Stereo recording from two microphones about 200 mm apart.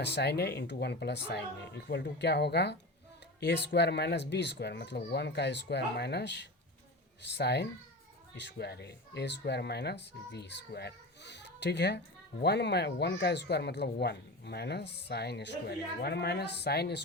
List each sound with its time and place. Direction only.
0.0 s speech: 55° left (ahead or behind)